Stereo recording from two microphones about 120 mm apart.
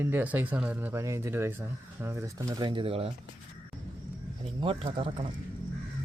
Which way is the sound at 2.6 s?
40° right (ahead or behind).